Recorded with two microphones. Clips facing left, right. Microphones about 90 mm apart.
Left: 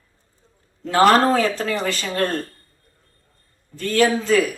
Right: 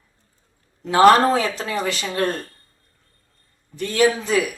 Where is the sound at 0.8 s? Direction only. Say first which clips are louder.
Right 2 dB; 20° right (ahead or behind).